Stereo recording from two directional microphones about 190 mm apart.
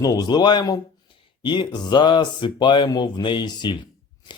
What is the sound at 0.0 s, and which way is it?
Speech, 20° left (ahead or behind).